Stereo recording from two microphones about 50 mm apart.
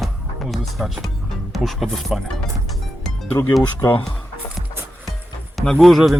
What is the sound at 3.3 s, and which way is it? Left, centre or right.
Speech, left.